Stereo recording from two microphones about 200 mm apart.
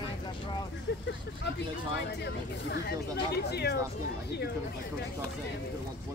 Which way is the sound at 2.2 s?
55° left (ahead or behind).